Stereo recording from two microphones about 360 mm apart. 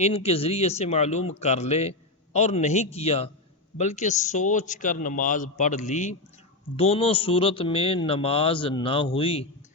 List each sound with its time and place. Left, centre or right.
0.0 s a man's voice: centre